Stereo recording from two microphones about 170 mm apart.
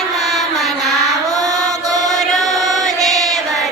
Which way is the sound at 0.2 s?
Centre (ahead or behind).